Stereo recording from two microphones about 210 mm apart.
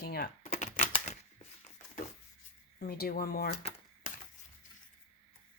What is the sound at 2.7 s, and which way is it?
Speech, 45° left (ahead or behind).